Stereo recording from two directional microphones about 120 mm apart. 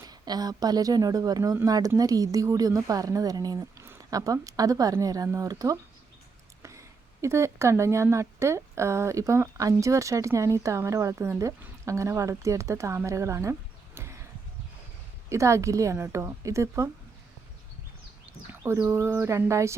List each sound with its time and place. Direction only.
0.0 s speech: 35° right (ahead or behind)
13.1 s music: 25° right (ahead or behind)
15.3 s speech: 25° right (ahead or behind)
18.6 s speech: 20° right (ahead or behind)